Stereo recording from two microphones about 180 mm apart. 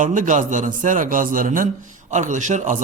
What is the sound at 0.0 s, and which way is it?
A man's voice, 45° right (ahead or behind).